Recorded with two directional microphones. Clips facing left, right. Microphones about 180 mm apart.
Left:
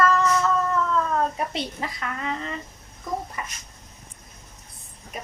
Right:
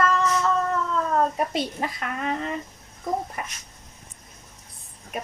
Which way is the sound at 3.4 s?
60° right (ahead or behind).